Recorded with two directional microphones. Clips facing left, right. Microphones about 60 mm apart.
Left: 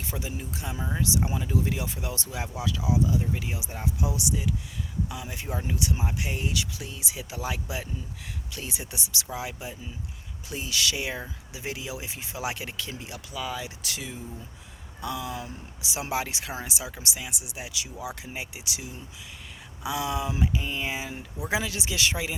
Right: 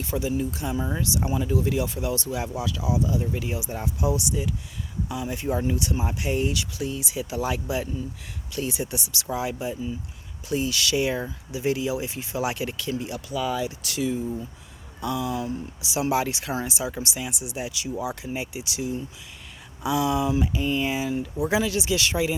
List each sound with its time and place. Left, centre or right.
0.0 s speech: left
1.5 s speech: left
3.3 s speech: centre
5.0 s speech: centre
8.7 s speech: centre
9.3 s speech: centre
10.5 s speech: centre
13.8 s speech: left
16.2 s speech: centre
20.5 s speech: centre